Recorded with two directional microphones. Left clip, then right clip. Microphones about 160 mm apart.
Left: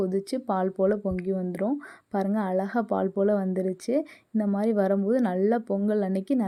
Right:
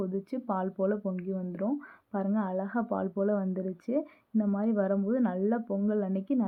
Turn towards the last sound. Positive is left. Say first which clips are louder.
# left 4 dB
turn(degrees=30)  # may be behind; listen again after turning